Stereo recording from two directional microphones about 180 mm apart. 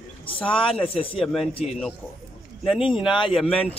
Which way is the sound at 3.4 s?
5° left (ahead or behind).